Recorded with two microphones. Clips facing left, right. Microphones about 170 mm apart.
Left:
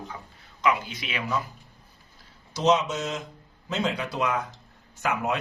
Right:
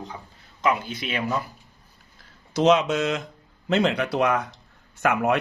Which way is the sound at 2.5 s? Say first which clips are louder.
Right 4 dB; 60° right (ahead or behind).